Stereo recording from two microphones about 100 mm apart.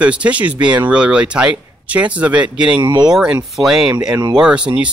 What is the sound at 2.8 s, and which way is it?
Speech, 45° right (ahead or behind).